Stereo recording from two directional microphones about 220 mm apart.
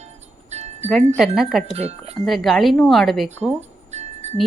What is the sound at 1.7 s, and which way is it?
Speech, 25° right (ahead or behind).